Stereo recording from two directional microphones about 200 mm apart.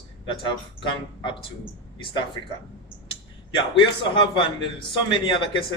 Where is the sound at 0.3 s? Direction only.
25° left (ahead or behind).